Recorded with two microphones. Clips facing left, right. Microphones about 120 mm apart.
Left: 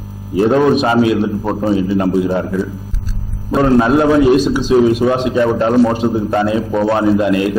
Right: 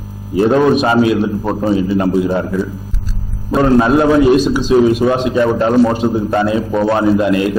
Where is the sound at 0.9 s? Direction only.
20° right (ahead or behind).